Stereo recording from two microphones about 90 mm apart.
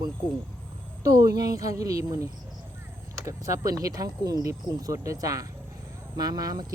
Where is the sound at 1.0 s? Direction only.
40° right (ahead or behind).